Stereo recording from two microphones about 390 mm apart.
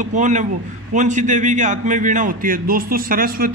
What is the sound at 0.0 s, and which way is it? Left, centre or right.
A man's voice, centre.